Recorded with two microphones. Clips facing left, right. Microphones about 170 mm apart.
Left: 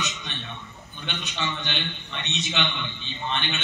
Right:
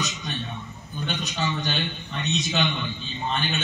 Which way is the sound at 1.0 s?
40° right (ahead or behind).